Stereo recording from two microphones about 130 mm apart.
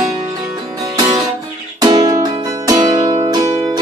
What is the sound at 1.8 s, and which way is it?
Music, 30° right (ahead or behind).